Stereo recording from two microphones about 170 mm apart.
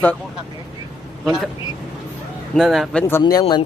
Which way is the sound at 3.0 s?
20° left (ahead or behind).